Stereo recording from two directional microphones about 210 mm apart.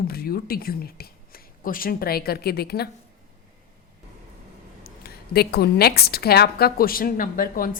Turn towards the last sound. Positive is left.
turn(degrees=40)  # may be behind; listen again after turning